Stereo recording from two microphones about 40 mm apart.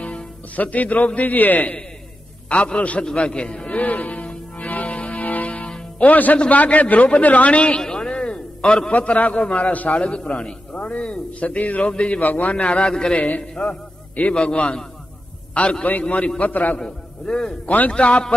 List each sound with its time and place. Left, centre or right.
0.0 s a man's voice: left
2.7 s a man's voice: left
3.6 s music: left
6.0 s a man's voice: left
7.8 s a sound: centre
8.9 s speech: left
9.4 s a man's voice: left
9.7 s speech: left
10.0 s a man's voice: left
12.2 s speech: left
12.7 s a man's voice: left
15.8 s a man's voice: left
16.8 s a man's voice: centre
17.6 s speech: left